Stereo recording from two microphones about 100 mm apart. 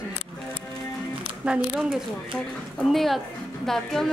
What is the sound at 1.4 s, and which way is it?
A woman's voice, 10° right (ahead or behind).